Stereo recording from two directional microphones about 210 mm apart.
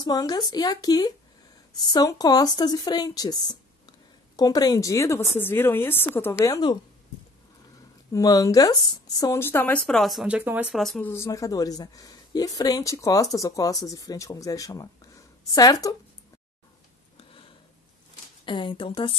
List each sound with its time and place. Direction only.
0.0 s speech: 20° left (ahead or behind)
8.1 s speech: 15° left (ahead or behind)
17.2 s a sound: 25° left (ahead or behind)
18.4 s speech: 25° left (ahead or behind)